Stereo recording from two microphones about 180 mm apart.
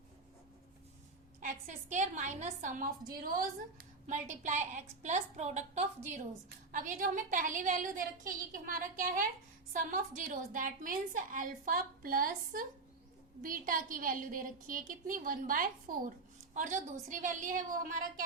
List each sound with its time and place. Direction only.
1.4 s a woman's voice: 45° right (ahead or behind)
4.0 s a woman's voice: 40° right (ahead or behind)
10.2 s a woman's voice: 45° right (ahead or behind)